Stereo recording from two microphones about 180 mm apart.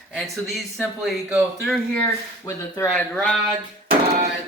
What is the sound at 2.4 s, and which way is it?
Speech, 15° left (ahead or behind).